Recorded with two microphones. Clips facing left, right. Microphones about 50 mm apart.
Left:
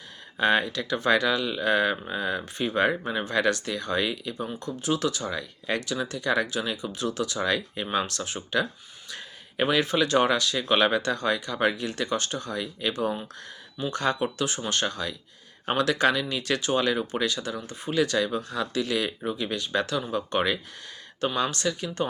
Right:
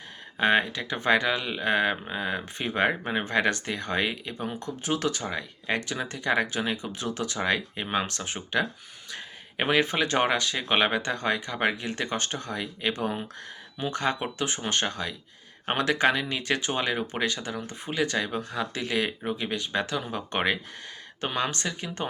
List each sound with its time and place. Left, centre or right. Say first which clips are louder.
0.3 s speech: even; right